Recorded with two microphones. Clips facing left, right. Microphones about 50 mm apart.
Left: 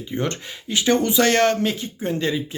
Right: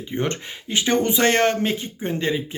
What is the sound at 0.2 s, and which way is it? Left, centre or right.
Speech, right.